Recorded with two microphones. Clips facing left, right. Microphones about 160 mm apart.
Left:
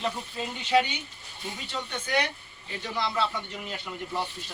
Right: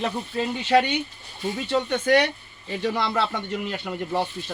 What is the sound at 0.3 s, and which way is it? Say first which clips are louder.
Speech: right 5 dB; 55° right (ahead or behind).